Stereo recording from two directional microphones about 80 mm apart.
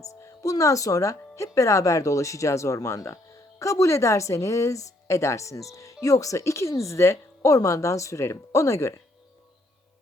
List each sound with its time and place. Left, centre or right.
0.0 s speech: left